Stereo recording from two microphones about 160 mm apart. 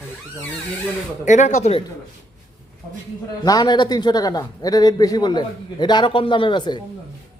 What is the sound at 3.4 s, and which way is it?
A man's voice, 25° left (ahead or behind).